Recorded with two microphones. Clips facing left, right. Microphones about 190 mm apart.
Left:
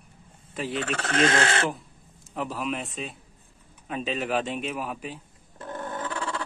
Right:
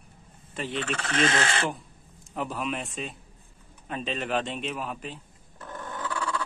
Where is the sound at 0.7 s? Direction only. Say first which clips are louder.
Left 2 dB; 45° left (ahead or behind).